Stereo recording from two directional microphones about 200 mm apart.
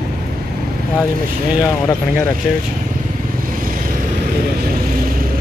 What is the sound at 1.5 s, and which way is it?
Speech, 5° right (ahead or behind).